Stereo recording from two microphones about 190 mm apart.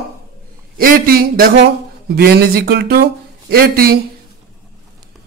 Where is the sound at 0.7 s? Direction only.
50° right (ahead or behind).